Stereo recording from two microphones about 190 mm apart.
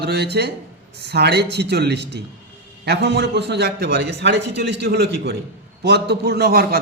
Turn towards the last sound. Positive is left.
turn(degrees=-55)  # may be behind; listen again after turning